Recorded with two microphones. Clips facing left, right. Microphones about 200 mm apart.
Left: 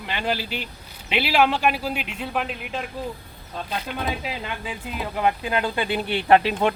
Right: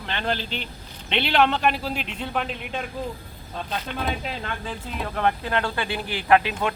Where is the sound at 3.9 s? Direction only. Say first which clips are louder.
Even; 5° left (ahead or behind).